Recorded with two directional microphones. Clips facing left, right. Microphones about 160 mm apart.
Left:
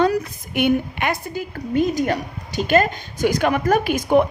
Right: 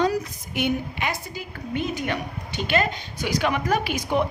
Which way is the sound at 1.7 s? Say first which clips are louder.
Left 7 dB; 40° left (ahead or behind).